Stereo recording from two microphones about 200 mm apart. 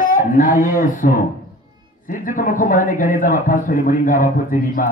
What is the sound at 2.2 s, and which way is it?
Speech, 40° left (ahead or behind).